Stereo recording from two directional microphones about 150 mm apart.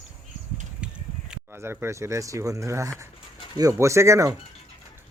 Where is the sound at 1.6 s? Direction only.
15° right (ahead or behind).